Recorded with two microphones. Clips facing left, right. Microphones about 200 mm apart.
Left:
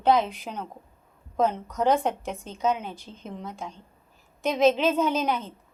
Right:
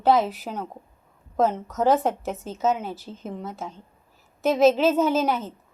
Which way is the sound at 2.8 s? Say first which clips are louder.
Right 4 dB; 5° right (ahead or behind).